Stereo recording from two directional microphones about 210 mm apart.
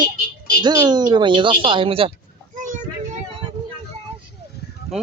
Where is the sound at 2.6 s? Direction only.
35° right (ahead or behind).